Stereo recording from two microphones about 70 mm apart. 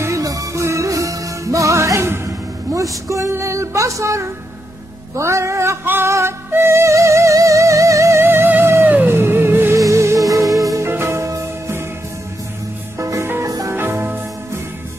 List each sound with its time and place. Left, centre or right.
0.0 s music: right
9.8 s music: right
10.9 s music: right
13.0 s music: right
13.7 s music: right